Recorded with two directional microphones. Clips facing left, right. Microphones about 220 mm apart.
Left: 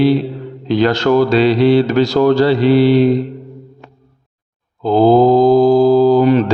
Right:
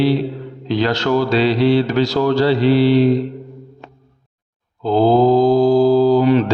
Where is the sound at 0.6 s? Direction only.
50° left (ahead or behind).